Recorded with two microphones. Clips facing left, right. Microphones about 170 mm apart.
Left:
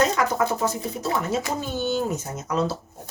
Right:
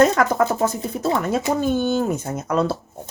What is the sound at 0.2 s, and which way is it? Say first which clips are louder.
Speech: right 4 dB; 50° right (ahead or behind).